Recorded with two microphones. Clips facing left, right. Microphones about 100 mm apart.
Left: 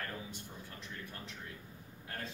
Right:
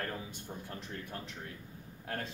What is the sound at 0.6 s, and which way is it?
Speech, 50° right (ahead or behind).